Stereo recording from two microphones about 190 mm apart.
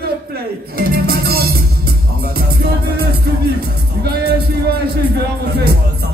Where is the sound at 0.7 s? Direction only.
55° right (ahead or behind).